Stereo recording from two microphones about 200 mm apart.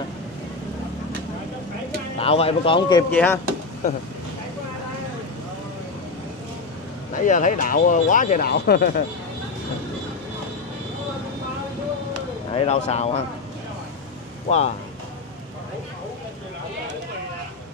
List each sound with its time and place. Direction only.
2.1 s a man's voice: 30° left (ahead or behind)
3.1 s speech: 10° left (ahead or behind)
7.2 s speech: 40° left (ahead or behind)
12.5 s speech: 35° left (ahead or behind)
14.5 s speech: 35° left (ahead or behind)